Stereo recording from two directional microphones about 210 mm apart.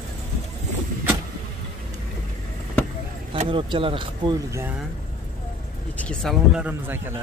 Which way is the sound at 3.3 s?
25° right (ahead or behind).